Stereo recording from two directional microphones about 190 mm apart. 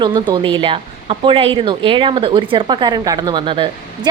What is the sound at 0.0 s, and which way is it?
A woman's voice, 25° right (ahead or behind).